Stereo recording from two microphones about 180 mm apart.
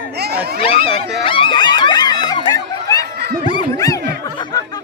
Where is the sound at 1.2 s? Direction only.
25° left (ahead or behind).